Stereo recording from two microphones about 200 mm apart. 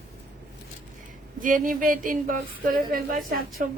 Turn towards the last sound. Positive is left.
turn(degrees=-45)  # may be behind; listen again after turning